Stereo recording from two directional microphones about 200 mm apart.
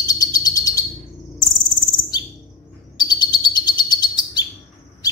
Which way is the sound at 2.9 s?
20° left (ahead or behind).